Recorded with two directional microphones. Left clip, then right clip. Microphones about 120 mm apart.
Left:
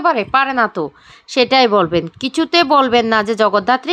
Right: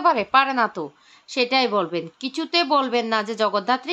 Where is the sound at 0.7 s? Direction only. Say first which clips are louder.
Left 9 dB; 75° left (ahead or behind).